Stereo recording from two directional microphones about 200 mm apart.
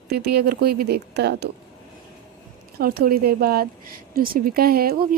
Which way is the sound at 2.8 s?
50° right (ahead or behind).